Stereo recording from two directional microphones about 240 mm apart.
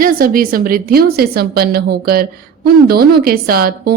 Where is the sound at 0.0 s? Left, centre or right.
Right.